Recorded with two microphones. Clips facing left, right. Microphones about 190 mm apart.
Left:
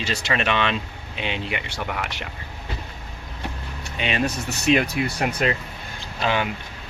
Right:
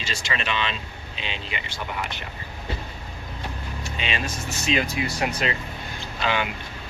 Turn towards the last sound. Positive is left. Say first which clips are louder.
# left 2 dB
turn(degrees=45)  # may be behind; listen again after turning